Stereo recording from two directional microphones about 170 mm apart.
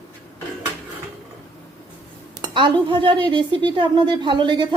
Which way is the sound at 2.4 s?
30° right (ahead or behind).